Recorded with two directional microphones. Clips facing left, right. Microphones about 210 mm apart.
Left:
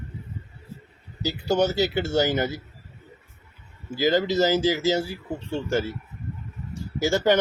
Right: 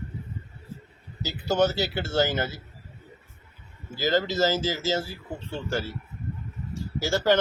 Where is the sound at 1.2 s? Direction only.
15° left (ahead or behind).